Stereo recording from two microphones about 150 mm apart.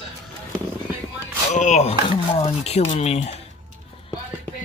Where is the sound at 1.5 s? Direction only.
50° left (ahead or behind).